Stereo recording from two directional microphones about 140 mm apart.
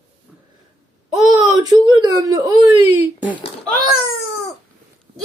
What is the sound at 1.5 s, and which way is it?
Speech, 25° right (ahead or behind).